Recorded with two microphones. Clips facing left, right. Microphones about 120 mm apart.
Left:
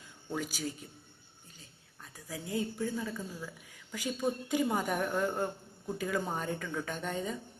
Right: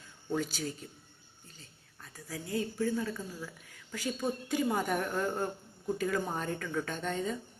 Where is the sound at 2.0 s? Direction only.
20° left (ahead or behind).